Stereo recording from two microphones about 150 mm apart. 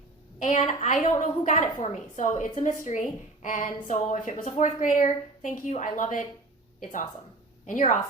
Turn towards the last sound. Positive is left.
turn(degrees=60)  # may be behind; listen again after turning